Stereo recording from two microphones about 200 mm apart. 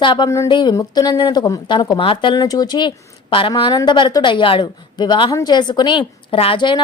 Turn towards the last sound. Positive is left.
turn(degrees=25)  # may be behind; listen again after turning